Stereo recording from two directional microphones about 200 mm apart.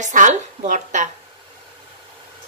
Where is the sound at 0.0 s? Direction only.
40° right (ahead or behind).